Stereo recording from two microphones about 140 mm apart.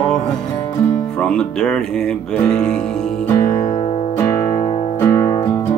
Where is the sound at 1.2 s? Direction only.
5° left (ahead or behind).